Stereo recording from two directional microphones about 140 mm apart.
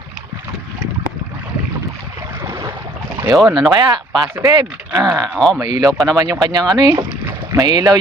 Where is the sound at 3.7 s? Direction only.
30° right (ahead or behind).